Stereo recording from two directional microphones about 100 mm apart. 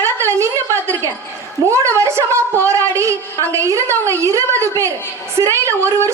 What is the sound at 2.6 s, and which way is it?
A woman's voice, 30° right (ahead or behind).